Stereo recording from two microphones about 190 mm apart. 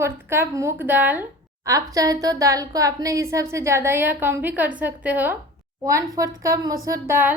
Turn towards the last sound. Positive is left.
turn(degrees=-10)  # may be behind; listen again after turning